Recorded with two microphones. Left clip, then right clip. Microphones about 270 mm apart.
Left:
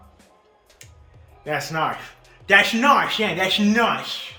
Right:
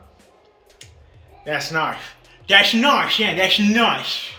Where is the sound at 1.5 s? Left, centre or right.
Left.